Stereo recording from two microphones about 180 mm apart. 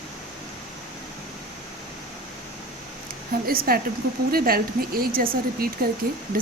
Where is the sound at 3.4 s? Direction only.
55° right (ahead or behind).